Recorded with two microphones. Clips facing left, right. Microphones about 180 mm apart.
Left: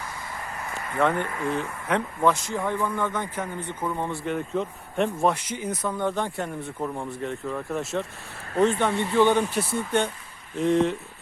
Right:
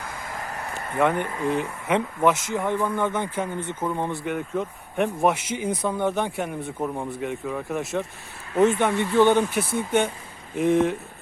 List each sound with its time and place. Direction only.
0.9 s speech: 15° right (ahead or behind)
5.8 s speech: 15° right (ahead or behind)